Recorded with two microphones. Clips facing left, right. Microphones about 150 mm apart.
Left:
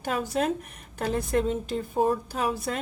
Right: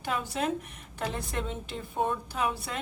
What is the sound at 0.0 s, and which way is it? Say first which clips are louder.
A woman's voice: left 4 dB; 40° left (ahead or behind).